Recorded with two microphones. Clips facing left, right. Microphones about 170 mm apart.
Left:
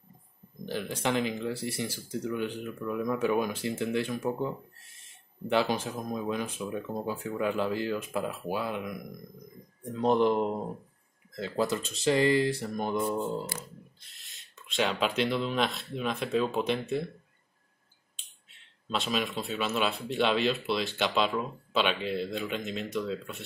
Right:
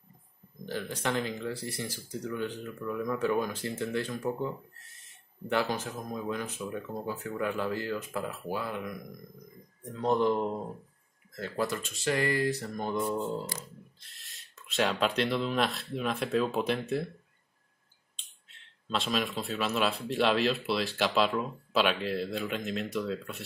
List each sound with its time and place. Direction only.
0.7 s speech: 15° left (ahead or behind)
14.0 s speech: centre (ahead or behind)
18.9 s speech: centre (ahead or behind)